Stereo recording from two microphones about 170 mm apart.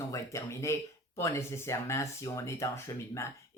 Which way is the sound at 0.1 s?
20° left (ahead or behind).